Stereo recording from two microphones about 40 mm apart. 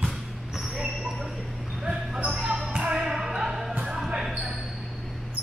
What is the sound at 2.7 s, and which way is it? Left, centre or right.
Music, centre.